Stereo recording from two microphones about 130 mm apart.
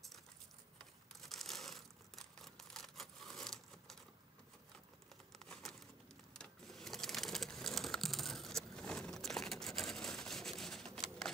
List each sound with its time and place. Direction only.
1.2 s crumpling: centre (ahead or behind)
5.1 s crumpling: 5° left (ahead or behind)
6.3 s sewing machine: 5° left (ahead or behind)